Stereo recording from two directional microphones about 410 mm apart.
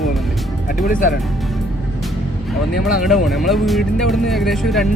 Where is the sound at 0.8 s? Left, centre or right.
Centre.